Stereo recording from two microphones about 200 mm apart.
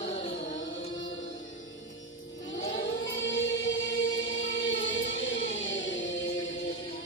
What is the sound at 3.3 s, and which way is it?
Music, 70° left (ahead or behind).